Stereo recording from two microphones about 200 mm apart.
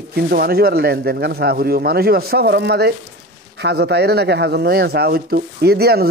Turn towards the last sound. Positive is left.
turn(degrees=-50)  # may be behind; listen again after turning